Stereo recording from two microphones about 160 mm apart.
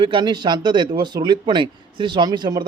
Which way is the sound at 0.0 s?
30° right (ahead or behind).